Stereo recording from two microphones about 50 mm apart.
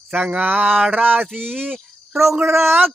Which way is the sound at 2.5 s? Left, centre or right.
Right.